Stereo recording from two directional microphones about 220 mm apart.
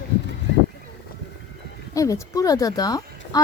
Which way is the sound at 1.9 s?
15° left (ahead or behind).